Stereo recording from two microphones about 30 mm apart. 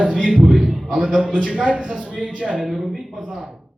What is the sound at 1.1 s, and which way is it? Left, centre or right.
A man's voice, right.